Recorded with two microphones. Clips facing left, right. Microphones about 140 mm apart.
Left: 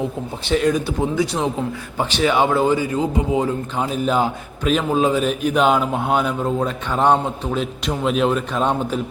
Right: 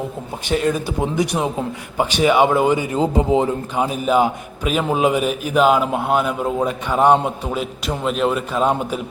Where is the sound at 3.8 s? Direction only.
10° right (ahead or behind).